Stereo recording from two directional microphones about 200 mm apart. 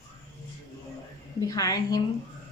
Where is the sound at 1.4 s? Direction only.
15° left (ahead or behind).